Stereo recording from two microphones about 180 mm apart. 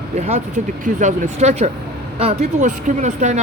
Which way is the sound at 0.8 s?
45° right (ahead or behind).